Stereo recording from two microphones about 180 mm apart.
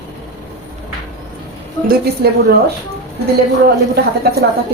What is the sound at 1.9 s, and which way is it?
Speech, 60° right (ahead or behind).